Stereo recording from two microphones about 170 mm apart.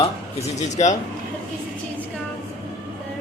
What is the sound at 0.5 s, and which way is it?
Speech, 45° left (ahead or behind).